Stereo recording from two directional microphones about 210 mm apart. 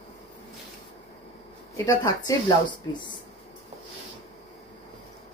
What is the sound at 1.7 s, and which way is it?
Speech, 15° left (ahead or behind).